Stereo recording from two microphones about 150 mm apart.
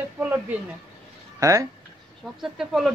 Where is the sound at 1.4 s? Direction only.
20° right (ahead or behind).